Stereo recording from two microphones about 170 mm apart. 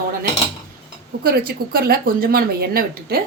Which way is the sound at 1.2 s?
60° right (ahead or behind).